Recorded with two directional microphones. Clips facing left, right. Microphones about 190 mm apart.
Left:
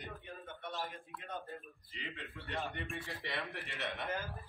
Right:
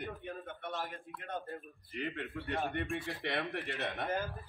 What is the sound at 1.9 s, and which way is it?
Speech, 55° right (ahead or behind).